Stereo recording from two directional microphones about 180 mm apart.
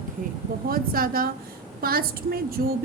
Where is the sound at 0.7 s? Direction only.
55° right (ahead or behind).